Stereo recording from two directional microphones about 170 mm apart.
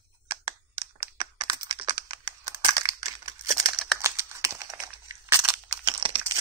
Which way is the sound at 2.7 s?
20° right (ahead or behind).